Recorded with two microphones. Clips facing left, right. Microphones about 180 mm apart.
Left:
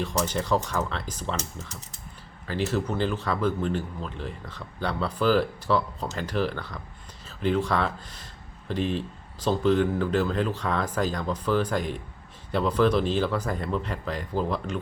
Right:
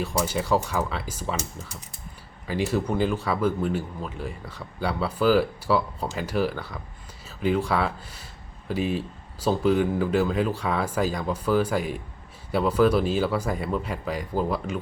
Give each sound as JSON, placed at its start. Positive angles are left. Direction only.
{"t": 0.0, "sound": "speech", "side_deg": -10}